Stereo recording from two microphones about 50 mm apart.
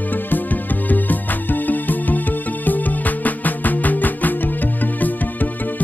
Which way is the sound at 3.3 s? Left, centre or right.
Left.